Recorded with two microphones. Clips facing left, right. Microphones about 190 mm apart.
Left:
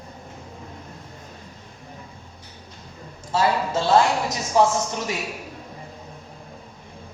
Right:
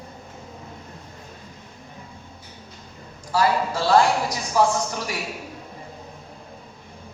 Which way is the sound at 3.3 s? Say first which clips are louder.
Even; 25° left (ahead or behind).